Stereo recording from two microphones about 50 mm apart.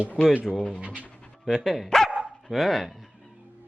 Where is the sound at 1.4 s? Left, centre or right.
Centre.